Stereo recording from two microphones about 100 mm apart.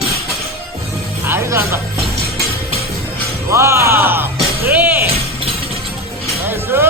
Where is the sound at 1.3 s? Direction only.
30° right (ahead or behind).